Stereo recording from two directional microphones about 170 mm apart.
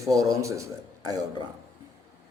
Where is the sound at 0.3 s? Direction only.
20° right (ahead or behind).